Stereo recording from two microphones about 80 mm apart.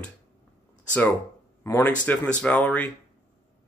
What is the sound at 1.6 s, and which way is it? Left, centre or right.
Speech, left.